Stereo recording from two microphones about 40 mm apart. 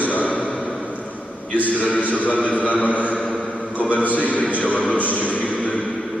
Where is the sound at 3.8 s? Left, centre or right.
Left.